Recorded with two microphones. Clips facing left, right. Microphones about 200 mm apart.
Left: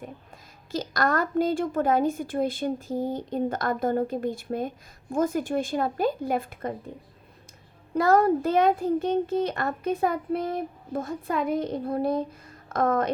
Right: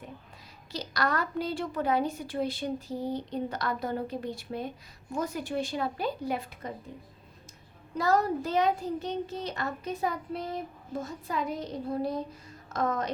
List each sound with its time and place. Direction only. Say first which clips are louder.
0.7 s a woman's voice: left 5 dB; 50° left (ahead or behind)
7.9 s a child's voice: left 6 dB; 55° left (ahead or behind)